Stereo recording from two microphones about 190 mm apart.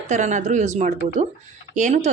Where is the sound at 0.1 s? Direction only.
40° right (ahead or behind).